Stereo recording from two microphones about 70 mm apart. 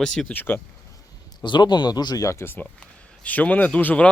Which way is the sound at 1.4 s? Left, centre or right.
Left.